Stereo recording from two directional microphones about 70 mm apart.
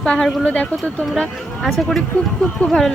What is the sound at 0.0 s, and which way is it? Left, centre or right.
Speech, centre.